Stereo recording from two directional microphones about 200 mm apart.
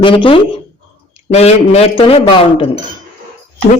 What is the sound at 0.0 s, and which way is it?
Speech, 25° left (ahead or behind).